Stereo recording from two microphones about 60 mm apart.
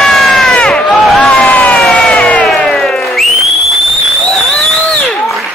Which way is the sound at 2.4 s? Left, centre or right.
Centre.